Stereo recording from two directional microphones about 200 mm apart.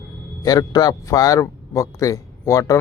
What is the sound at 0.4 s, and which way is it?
Speech, 20° left (ahead or behind).